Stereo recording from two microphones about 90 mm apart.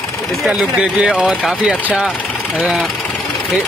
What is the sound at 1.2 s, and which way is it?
Speech, 5° right (ahead or behind).